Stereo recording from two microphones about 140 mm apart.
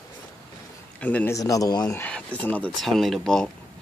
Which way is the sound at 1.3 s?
25° left (ahead or behind).